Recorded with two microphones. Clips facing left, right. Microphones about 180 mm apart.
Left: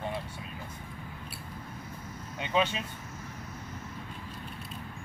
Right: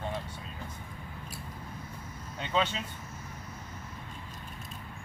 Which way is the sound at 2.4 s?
15° left (ahead or behind).